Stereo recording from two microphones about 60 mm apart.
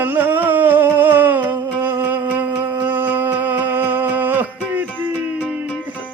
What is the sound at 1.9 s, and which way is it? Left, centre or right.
Music, right.